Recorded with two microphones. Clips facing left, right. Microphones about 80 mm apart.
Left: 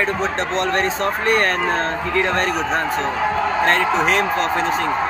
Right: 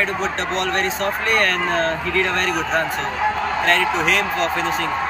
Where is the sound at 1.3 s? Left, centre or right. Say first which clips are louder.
Left 1 dB; left.